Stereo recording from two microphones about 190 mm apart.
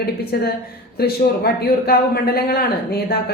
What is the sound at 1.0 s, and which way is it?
A woman's voice, 55° left (ahead or behind).